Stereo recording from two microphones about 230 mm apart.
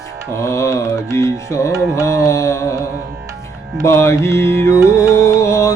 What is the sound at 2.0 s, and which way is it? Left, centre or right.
Carnatic music, centre.